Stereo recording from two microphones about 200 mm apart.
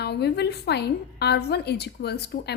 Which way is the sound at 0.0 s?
55° left (ahead or behind).